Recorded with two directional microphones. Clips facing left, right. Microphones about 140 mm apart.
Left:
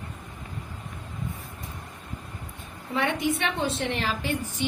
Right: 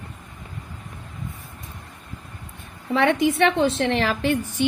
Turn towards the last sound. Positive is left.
turn(degrees=-70)  # may be behind; listen again after turning